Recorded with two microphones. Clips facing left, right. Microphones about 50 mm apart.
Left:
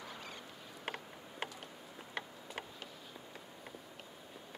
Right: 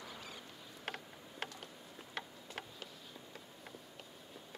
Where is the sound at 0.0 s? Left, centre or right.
Centre.